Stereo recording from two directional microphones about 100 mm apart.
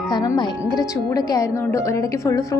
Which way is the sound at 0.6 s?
35° left (ahead or behind).